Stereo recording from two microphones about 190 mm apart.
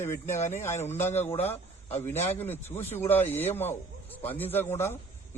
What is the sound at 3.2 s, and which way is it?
Speech, 35° left (ahead or behind).